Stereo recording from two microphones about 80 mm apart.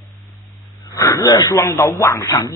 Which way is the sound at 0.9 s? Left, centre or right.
Left.